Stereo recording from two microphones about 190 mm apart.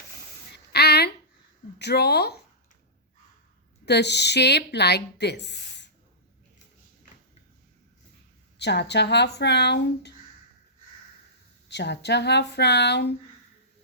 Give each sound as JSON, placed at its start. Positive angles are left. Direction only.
{"t": 0.5, "sound": "a sound", "side_deg": 60}
{"t": 1.8, "sound": "a woman's voice", "side_deg": 60}
{"t": 3.8, "sound": "a woman's voice", "side_deg": 65}
{"t": 8.5, "sound": "a woman's voice", "side_deg": 65}
{"t": 11.7, "sound": "a woman's voice", "side_deg": 65}